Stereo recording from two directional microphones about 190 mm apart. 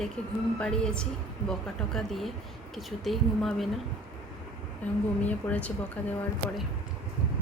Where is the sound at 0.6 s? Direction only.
5° left (ahead or behind).